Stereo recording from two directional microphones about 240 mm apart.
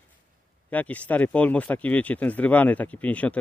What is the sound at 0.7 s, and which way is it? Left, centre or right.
Speech, centre.